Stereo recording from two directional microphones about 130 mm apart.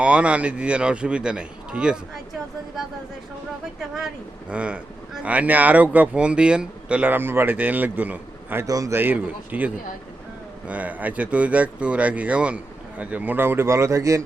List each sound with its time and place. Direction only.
0.0 s speech: 10° right (ahead or behind)
3.8 s speech: centre (ahead or behind)
8.6 s speech: 25° right (ahead or behind)